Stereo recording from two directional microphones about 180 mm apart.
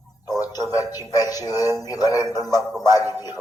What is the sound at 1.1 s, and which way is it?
A man's voice, 20° left (ahead or behind).